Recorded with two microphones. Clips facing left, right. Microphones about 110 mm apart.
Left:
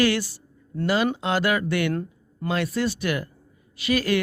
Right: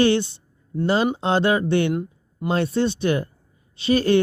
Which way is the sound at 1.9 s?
15° right (ahead or behind).